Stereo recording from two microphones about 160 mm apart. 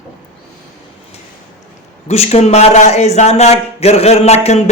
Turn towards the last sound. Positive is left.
turn(degrees=45)  # may be behind; listen again after turning